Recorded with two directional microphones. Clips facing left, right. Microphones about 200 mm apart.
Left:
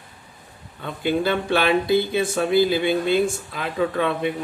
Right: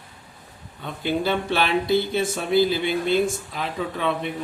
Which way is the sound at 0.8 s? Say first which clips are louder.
Left 2 dB; 55° left (ahead or behind).